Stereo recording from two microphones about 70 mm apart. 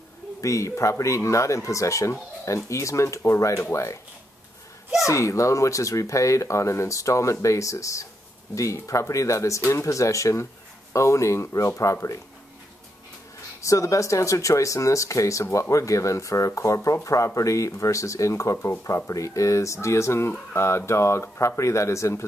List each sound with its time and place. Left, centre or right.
0.4 s speech: left
5.0 s speech: left
13.6 s speech: left